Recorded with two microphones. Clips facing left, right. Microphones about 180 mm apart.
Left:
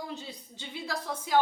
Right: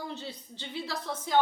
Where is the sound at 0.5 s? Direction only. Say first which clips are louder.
Left 1 dB; 10° left (ahead or behind).